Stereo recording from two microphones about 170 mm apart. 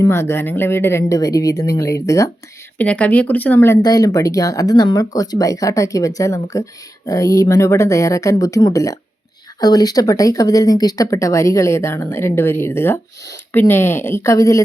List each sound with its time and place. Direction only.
0.0 s speech: 15° left (ahead or behind)